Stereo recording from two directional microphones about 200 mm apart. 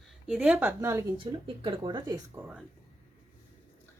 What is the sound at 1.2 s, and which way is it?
Speech, 25° right (ahead or behind).